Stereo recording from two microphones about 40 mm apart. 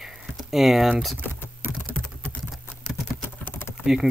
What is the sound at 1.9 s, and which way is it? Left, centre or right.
Typing, left.